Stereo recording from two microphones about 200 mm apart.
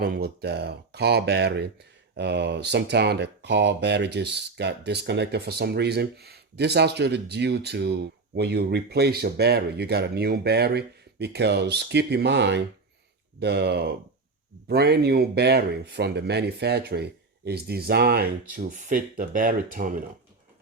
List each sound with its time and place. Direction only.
0.0 s speech: 55° right (ahead or behind)